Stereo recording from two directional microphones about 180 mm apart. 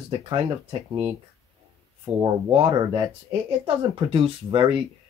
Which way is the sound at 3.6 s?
30° right (ahead or behind).